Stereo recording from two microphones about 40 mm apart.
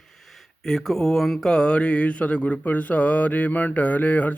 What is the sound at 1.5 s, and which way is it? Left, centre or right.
Speech, left.